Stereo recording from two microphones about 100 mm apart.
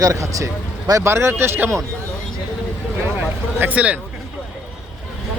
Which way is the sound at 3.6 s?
15° right (ahead or behind).